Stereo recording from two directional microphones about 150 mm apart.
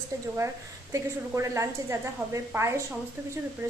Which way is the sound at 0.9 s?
20° right (ahead or behind).